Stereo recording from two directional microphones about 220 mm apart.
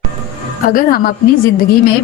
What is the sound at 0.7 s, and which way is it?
Speech, 40° left (ahead or behind).